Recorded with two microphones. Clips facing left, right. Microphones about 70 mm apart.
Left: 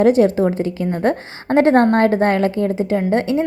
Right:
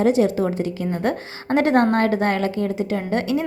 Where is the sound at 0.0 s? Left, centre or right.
Left.